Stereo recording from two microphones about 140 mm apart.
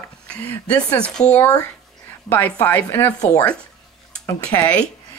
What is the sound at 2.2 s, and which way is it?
Speech, 10° left (ahead or behind).